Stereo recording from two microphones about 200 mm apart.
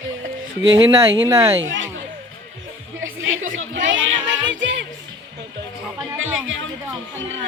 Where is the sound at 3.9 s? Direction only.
70° right (ahead or behind).